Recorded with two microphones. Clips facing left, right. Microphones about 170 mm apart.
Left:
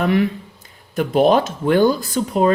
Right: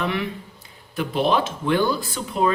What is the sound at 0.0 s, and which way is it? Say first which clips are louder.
Speech: left 8 dB; 40° left (ahead or behind).